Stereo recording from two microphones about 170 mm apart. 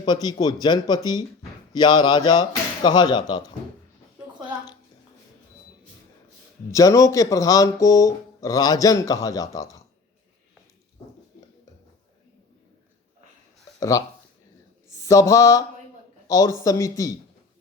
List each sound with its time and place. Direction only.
0.0 s speech: 25° left (ahead or behind)
6.7 s speech: 20° left (ahead or behind)
13.7 s speech: 20° left (ahead or behind)
14.8 s mantra: 20° left (ahead or behind)
16.2 s speech: 20° left (ahead or behind)